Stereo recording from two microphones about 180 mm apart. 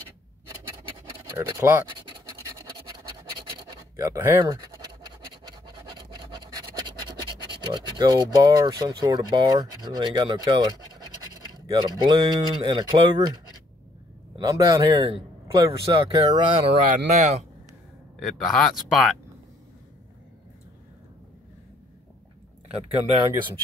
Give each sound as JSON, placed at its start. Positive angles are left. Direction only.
{"t": 0.8, "sound": "scratch", "side_deg": -30}
{"t": 1.5, "sound": "speech", "side_deg": -15}
{"t": 2.0, "sound": "scratch", "side_deg": -30}
{"t": 3.3, "sound": "scratch", "side_deg": -20}
{"t": 7.1, "sound": "speech", "side_deg": -25}
{"t": 14.4, "sound": "speech", "side_deg": -20}
{"t": 16.9, "sound": "speech", "side_deg": -40}
{"t": 18.2, "sound": "speech", "side_deg": 5}